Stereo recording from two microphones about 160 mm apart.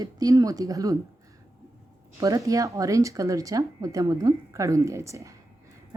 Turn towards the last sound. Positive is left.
turn(degrees=-20)  # may be behind; listen again after turning